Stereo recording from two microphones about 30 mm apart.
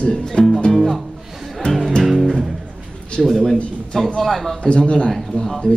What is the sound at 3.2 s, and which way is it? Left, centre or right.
A man's voice, centre.